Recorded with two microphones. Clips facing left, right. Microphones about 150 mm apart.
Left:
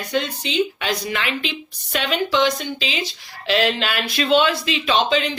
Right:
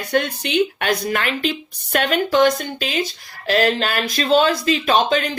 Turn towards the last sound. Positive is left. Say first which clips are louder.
# right 2 dB
turn(degrees=-50)  # may be behind; listen again after turning